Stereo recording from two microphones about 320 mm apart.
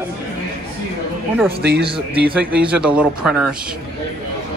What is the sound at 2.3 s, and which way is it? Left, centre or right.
A man's voice, centre.